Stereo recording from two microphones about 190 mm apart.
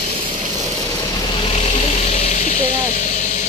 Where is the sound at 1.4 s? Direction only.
35° left (ahead or behind).